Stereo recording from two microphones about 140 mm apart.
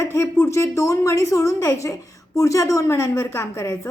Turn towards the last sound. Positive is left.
turn(degrees=20)  # may be behind; listen again after turning